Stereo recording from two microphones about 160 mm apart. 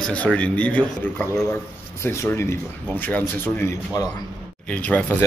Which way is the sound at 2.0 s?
15° left (ahead or behind).